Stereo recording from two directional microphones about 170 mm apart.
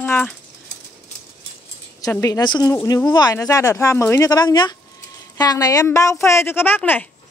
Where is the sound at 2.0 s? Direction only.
20° left (ahead or behind).